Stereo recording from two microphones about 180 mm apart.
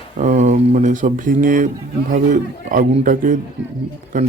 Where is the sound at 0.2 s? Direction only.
40° right (ahead or behind).